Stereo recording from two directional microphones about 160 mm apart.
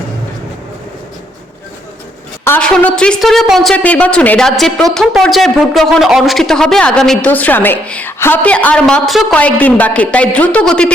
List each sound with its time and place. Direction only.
2.4 s a woman's voice: 10° left (ahead or behind)